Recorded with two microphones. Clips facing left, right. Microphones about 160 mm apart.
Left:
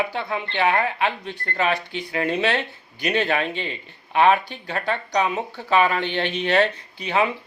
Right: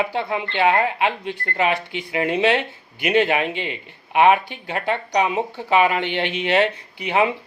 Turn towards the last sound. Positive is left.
turn(degrees=-20)  # may be behind; listen again after turning